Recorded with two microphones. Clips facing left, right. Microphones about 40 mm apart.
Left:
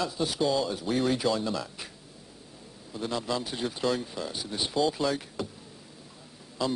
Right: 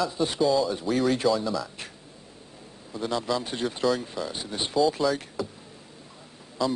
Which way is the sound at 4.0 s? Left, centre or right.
Centre.